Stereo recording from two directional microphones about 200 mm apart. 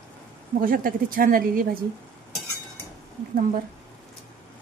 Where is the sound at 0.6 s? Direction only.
45° right (ahead or behind).